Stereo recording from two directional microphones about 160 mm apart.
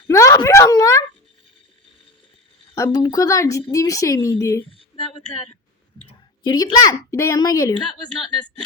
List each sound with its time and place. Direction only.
0.1 s a sound: 20° left (ahead or behind)
2.7 s a woman's voice: 25° left (ahead or behind)
6.4 s a woman's voice: 25° left (ahead or behind)